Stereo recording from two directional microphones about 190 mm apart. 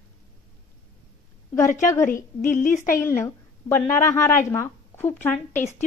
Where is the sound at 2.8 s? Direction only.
15° left (ahead or behind).